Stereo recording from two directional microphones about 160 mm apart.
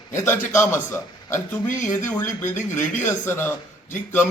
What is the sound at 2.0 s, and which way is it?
A man's voice, 15° left (ahead or behind).